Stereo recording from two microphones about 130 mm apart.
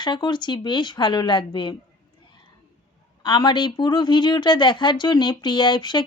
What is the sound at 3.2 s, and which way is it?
A woman's voice, 35° left (ahead or behind).